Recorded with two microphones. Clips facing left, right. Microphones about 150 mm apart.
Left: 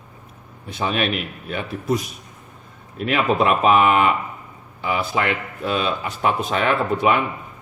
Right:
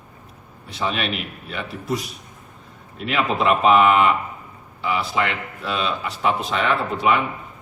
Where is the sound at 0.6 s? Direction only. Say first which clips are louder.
Left 2 dB; 50° left (ahead or behind).